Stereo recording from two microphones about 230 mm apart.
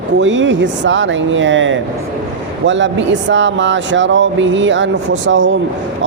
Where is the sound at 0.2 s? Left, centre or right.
Right.